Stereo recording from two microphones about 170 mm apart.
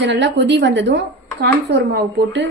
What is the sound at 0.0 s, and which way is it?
Speech, 90° right.